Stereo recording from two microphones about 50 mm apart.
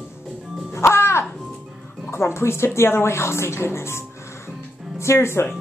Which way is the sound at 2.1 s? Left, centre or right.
Left.